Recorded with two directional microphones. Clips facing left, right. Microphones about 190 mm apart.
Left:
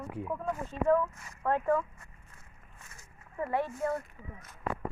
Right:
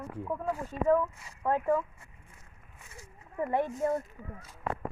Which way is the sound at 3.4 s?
20° right (ahead or behind).